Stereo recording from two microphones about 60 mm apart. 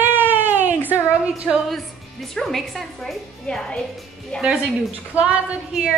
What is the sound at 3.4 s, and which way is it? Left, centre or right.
A woman's voice, centre.